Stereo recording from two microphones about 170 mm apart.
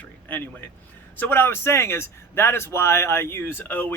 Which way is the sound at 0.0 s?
10° left (ahead or behind).